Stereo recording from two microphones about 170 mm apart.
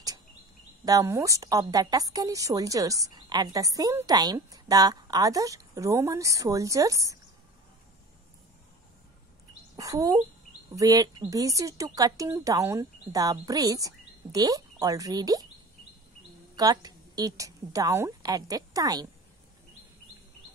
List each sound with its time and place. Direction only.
0.8 s a woman's voice: 20° right (ahead or behind)
9.8 s a woman's voice: 20° right (ahead or behind)
16.5 s a woman's voice: 25° right (ahead or behind)